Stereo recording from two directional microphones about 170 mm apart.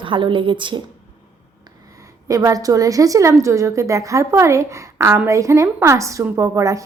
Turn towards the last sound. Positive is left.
turn(degrees=-20)  # may be behind; listen again after turning